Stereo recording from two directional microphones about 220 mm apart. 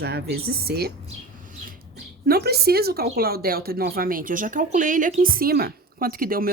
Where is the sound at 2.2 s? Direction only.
45° right (ahead or behind).